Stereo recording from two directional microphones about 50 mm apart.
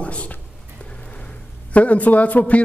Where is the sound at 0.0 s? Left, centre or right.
Left.